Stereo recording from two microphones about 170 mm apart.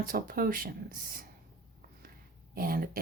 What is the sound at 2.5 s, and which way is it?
Speech, 60° right (ahead or behind).